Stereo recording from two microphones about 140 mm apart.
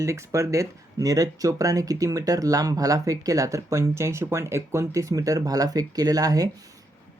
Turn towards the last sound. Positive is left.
turn(degrees=-25)  # may be behind; listen again after turning